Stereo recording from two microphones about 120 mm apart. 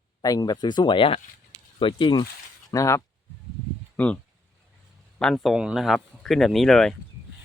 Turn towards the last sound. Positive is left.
turn(degrees=5)  # may be behind; listen again after turning